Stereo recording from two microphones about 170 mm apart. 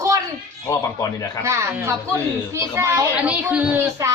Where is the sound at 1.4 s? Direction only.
15° right (ahead or behind).